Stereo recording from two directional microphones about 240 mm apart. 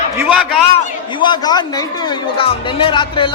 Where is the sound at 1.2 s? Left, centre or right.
Centre.